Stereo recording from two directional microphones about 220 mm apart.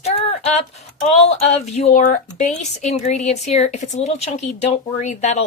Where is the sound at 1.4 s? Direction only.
30° left (ahead or behind).